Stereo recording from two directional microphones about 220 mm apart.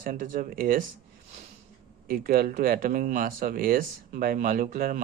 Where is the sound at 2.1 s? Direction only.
40° right (ahead or behind).